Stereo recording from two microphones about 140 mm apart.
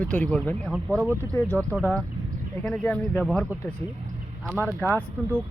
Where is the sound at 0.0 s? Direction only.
10° left (ahead or behind).